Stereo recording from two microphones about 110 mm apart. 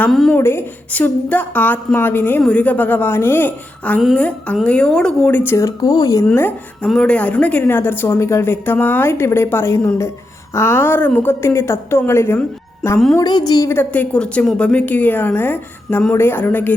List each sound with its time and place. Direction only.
0.1 s a woman's voice: 5° left (ahead or behind)
0.3 s a woman's voice: 20° left (ahead or behind)
6.8 s a woman's voice: 10° left (ahead or behind)
13.1 s a woman's voice: 40° left (ahead or behind)
13.7 s a woman's voice: 20° left (ahead or behind)